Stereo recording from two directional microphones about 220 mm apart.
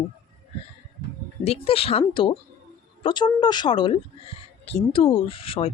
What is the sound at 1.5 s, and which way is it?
Speech, 25° left (ahead or behind).